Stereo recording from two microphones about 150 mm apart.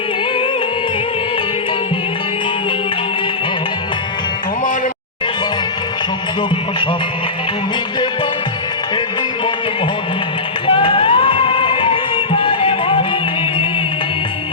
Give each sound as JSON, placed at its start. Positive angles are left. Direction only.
{"t": 10.7, "sound": "music", "side_deg": 35}